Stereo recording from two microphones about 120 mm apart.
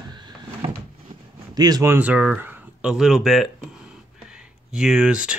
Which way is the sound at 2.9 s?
5° right (ahead or behind).